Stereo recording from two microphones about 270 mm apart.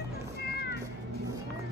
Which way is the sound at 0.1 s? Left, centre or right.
Left.